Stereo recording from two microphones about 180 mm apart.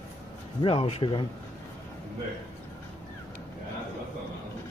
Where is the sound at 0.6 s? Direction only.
35° left (ahead or behind).